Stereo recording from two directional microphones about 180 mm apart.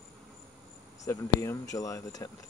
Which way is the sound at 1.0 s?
15° left (ahead or behind).